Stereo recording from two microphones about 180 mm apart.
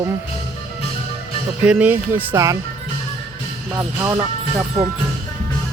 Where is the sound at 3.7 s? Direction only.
20° right (ahead or behind).